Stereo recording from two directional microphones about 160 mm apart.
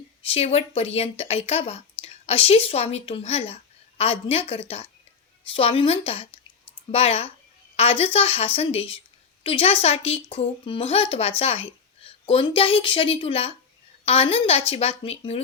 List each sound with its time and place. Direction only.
0.3 s a woman's voice: 40° left (ahead or behind)